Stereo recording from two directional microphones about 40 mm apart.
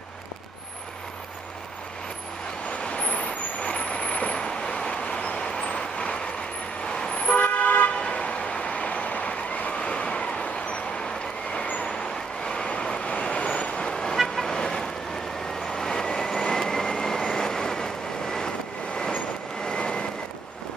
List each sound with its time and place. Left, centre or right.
2.8 s vehicle: left
8.0 s vehicle: left
9.8 s vehicle: left
11.5 s vehicle: left
11.9 s vehicle: left
14.1 s vehicle: centre
19.6 s vehicle: left